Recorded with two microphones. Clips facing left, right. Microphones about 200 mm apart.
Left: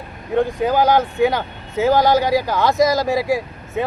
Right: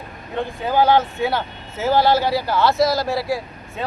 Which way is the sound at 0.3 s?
15° left (ahead or behind).